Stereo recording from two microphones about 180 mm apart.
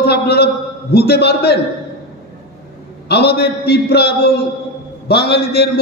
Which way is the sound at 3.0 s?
65° left (ahead or behind).